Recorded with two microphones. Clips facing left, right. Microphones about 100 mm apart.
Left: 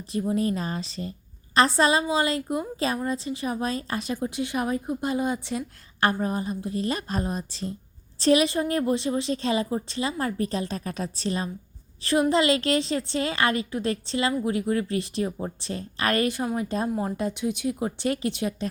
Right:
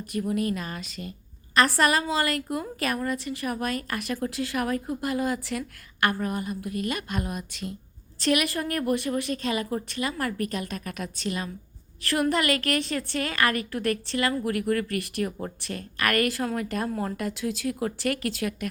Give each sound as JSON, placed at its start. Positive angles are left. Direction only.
{"t": 0.1, "sound": "a woman's voice", "side_deg": 25}